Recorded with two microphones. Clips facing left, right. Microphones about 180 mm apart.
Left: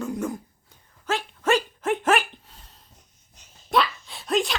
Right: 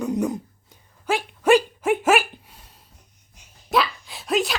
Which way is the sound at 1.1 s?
10° right (ahead or behind).